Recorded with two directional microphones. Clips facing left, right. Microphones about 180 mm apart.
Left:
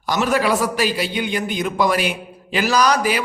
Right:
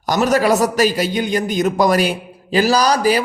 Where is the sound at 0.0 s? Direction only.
40° right (ahead or behind).